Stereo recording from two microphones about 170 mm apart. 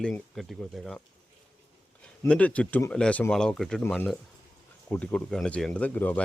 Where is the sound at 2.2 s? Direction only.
10° left (ahead or behind).